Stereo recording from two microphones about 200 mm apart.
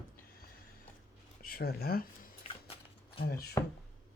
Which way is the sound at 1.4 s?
50° left (ahead or behind).